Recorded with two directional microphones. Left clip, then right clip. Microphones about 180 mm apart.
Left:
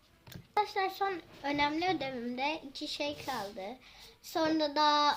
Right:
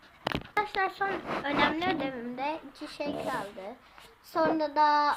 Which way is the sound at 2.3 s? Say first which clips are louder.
Right 1 dB; 15° left (ahead or behind).